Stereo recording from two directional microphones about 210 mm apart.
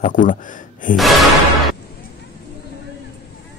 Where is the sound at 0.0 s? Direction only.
40° left (ahead or behind).